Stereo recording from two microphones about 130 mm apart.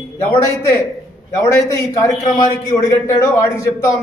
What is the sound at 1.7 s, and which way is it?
A man's voice, 25° left (ahead or behind).